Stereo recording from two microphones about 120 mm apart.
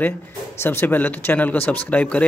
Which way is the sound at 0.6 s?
20° left (ahead or behind).